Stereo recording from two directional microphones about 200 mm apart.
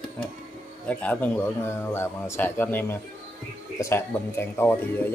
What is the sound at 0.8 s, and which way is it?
Speech, 5° left (ahead or behind).